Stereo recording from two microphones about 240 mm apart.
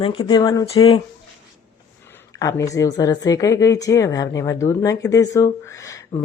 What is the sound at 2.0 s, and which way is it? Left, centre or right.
A woman's voice, centre.